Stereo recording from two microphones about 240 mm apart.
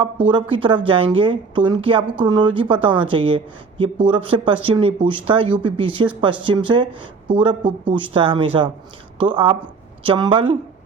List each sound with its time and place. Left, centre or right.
0.5 s speech: right